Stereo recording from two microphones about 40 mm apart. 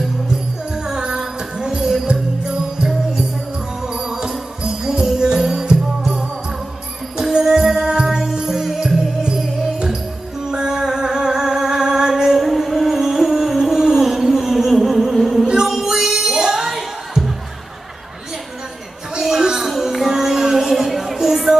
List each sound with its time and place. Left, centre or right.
0.7 s music: centre
7.2 s music: centre
9.2 s music: right
12.4 s music: centre
13.7 s a sound: centre
14.0 s music: centre
16.6 s music: centre
19.1 s a sound: centre
19.7 s music: centre